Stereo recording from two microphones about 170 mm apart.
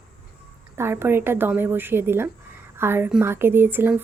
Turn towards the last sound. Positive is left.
turn(degrees=-10)  # may be behind; listen again after turning